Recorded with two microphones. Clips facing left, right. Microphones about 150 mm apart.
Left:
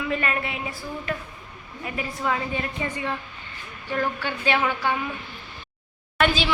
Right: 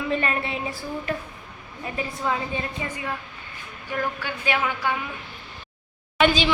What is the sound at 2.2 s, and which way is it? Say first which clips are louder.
Speech: left 1 dB; 15° right (ahead or behind).